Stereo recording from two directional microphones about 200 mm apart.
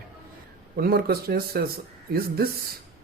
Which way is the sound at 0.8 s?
50° right (ahead or behind).